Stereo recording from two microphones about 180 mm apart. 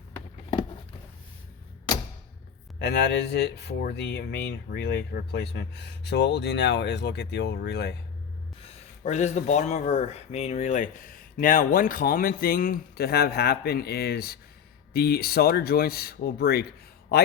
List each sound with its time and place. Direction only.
1.9 s a sound: 25° left (ahead or behind)
2.7 s speech: 65° left (ahead or behind)
8.6 s speech: 40° left (ahead or behind); by 16.6 s 60° left (ahead or behind)